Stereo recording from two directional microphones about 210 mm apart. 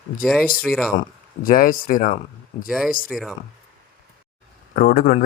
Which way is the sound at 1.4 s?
40° left (ahead or behind).